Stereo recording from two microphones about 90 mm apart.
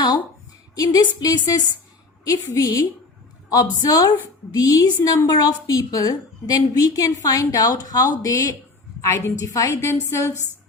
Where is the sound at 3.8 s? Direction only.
45° left (ahead or behind).